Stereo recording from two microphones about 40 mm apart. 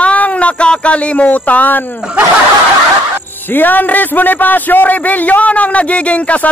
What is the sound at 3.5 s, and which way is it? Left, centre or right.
A man's voice, left.